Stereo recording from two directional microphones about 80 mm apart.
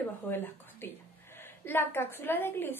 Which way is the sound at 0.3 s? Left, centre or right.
Left.